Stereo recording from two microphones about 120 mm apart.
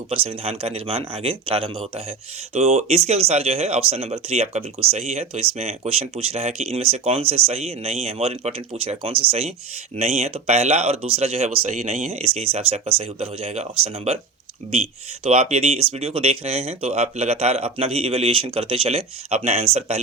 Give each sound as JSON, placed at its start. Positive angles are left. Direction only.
{"t": 0.1, "sound": "speech", "side_deg": -55}
{"t": 2.6, "sound": "speech", "side_deg": -65}